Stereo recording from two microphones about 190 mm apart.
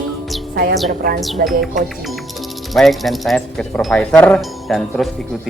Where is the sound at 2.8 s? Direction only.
Centre (ahead or behind).